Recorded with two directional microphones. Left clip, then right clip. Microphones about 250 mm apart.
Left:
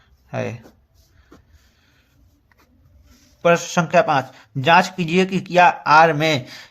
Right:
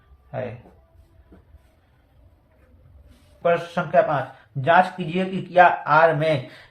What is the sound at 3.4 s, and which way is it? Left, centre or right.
Speech, left.